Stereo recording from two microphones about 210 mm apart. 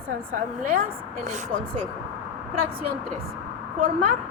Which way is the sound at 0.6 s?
40° right (ahead or behind).